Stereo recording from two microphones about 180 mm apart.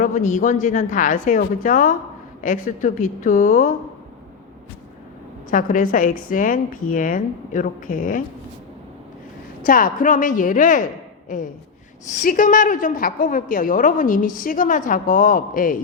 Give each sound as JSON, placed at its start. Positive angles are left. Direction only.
{"t": 0.0, "sound": "a woman's voice", "side_deg": 45}
{"t": 5.5, "sound": "a woman's voice", "side_deg": 50}
{"t": 9.6, "sound": "a woman's voice", "side_deg": 50}